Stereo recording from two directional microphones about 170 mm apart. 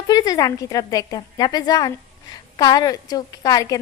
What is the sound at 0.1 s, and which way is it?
A woman's voice, 20° left (ahead or behind).